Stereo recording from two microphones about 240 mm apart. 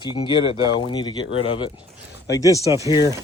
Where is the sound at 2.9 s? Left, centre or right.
Centre.